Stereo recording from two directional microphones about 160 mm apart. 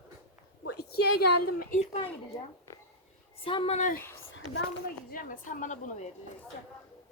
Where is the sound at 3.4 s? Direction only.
35° left (ahead or behind).